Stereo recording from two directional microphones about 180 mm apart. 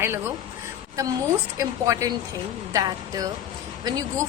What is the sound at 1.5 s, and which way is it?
A woman's voice, 20° right (ahead or behind).